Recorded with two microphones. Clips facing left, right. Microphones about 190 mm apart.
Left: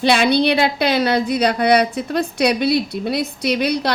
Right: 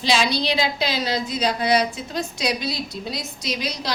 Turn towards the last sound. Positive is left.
turn(degrees=65)  # may be behind; listen again after turning